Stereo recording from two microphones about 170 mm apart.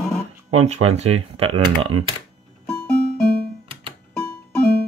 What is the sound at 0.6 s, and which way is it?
Speech, 40° right (ahead or behind).